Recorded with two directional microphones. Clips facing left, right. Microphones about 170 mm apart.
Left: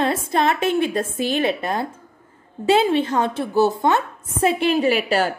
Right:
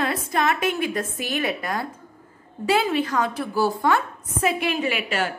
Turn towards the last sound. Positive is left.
turn(degrees=35)  # may be behind; listen again after turning